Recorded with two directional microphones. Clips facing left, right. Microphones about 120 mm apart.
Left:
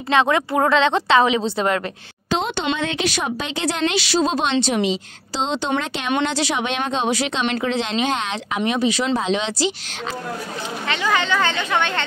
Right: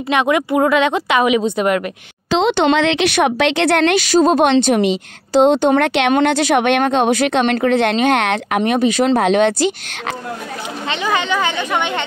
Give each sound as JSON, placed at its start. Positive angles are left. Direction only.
{"t": 0.1, "sound": "a woman's voice", "side_deg": -15}
{"t": 2.3, "sound": "a woman's voice", "side_deg": -80}
{"t": 10.9, "sound": "a woman's voice", "side_deg": -15}